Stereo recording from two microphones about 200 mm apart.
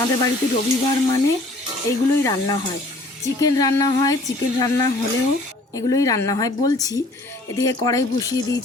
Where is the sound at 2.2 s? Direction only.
20° left (ahead or behind).